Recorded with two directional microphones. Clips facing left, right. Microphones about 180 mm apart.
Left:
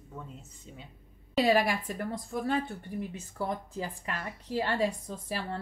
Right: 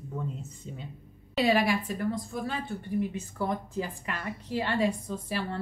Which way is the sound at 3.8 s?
35° left (ahead or behind).